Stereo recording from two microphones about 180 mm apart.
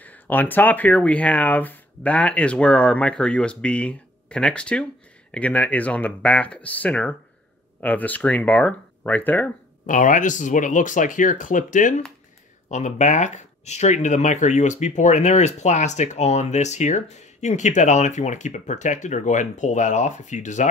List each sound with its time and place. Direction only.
0.0 s speech: 10° left (ahead or behind)
9.8 s speech: 45° left (ahead or behind)